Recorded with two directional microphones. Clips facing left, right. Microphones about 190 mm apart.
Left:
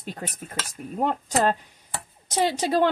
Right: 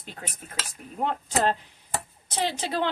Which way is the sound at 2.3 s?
45° left (ahead or behind).